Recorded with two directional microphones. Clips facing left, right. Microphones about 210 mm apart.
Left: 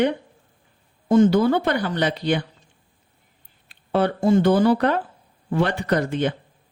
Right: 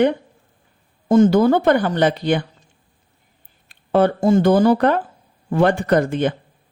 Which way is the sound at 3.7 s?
45° right (ahead or behind).